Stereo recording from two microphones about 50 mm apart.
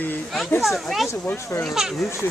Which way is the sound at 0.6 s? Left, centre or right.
Centre.